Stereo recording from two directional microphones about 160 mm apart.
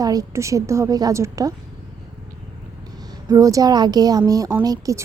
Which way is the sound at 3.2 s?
20° right (ahead or behind).